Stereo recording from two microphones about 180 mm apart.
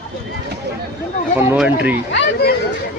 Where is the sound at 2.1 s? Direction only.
65° left (ahead or behind).